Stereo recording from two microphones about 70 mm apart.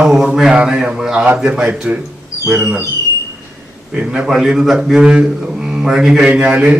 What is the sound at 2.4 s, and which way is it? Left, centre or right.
Speech, right.